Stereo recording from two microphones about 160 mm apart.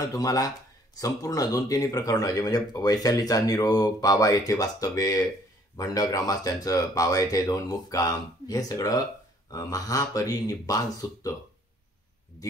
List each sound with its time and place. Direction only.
0.1 s speech: 20° left (ahead or behind)